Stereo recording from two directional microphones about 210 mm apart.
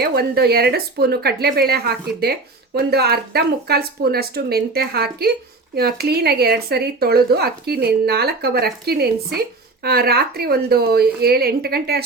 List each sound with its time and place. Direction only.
0.0 s speech: 45° right (ahead or behind)